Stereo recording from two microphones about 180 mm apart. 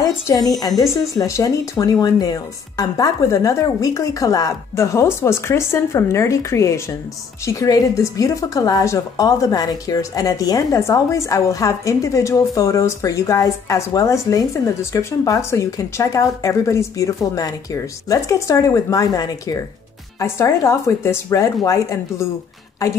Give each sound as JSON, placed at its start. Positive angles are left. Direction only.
{"t": 0.3, "sound": "a woman's voice", "side_deg": 20}